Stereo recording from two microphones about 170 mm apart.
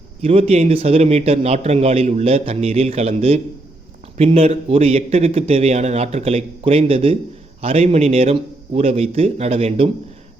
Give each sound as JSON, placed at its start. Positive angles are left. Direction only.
{"t": 0.2, "sound": "a man's voice", "side_deg": -35}